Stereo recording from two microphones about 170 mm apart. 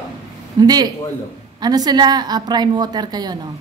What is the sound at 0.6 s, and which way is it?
A woman's voice, 25° right (ahead or behind).